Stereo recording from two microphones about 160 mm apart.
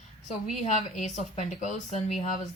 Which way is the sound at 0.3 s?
45° left (ahead or behind).